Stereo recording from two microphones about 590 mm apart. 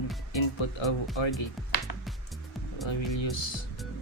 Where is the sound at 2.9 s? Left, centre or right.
Left.